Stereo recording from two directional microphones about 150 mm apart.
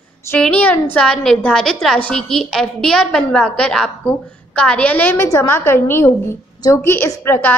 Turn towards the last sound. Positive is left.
turn(degrees=15)  # may be behind; listen again after turning